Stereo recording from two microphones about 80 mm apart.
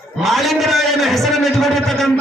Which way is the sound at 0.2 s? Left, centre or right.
Centre.